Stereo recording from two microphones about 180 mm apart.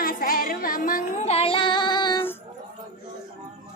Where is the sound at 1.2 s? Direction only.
35° left (ahead or behind).